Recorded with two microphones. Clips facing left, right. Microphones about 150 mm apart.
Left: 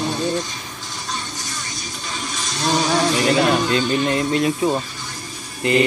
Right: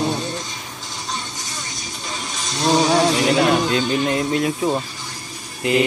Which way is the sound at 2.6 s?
20° right (ahead or behind).